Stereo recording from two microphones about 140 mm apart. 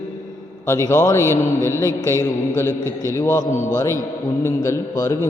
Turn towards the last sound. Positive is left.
turn(degrees=20)  # may be behind; listen again after turning